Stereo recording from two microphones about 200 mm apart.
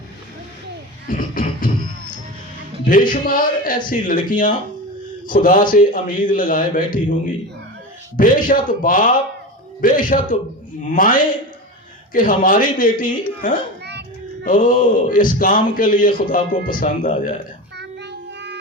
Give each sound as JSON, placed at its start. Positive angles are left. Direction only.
{"t": 1.0, "sound": "speech", "side_deg": 40}
{"t": 17.7, "sound": "child singing", "side_deg": -60}